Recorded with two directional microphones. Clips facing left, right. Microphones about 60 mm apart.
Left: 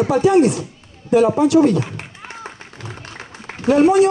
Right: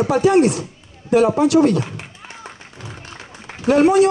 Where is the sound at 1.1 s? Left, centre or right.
Right.